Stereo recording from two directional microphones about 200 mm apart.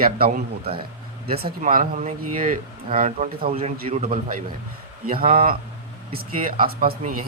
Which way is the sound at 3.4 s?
30° right (ahead or behind).